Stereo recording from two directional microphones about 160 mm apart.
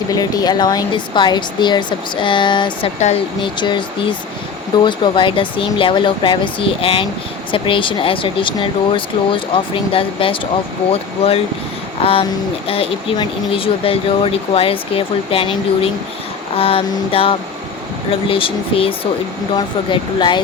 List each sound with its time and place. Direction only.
0.1 s speech: 25° left (ahead or behind)